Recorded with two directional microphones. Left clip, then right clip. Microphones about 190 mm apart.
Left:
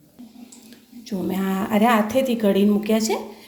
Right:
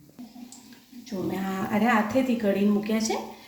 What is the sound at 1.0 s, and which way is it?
A woman's voice, 55° left (ahead or behind).